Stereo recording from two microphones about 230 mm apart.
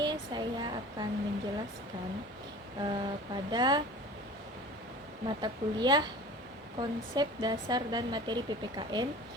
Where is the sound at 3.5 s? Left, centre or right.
Centre.